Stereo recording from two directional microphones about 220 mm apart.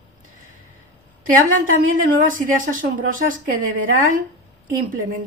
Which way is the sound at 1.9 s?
40° right (ahead or behind).